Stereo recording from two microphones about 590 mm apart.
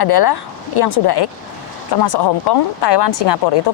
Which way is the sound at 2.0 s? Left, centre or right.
Left.